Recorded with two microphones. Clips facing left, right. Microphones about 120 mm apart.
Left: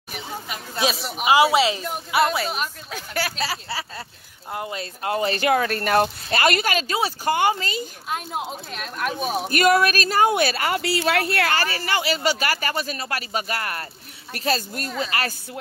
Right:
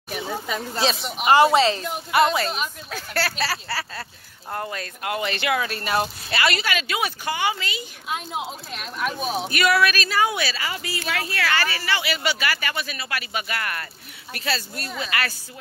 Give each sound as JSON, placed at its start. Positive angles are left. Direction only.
{"t": 0.8, "sound": "a woman's voice", "side_deg": 0}
{"t": 4.6, "sound": "speech", "side_deg": 25}
{"t": 7.2, "sound": "speech", "side_deg": 45}
{"t": 8.1, "sound": "speech", "side_deg": 0}
{"t": 9.5, "sound": "speech", "side_deg": 45}
{"t": 11.5, "sound": "speech", "side_deg": 40}